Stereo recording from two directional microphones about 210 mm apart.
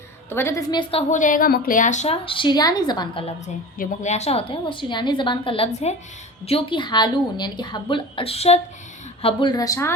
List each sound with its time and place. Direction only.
0.3 s a woman's voice: 10° left (ahead or behind)
1.1 s a woman's voice: 40° left (ahead or behind); by 9.9 s 15° left (ahead or behind)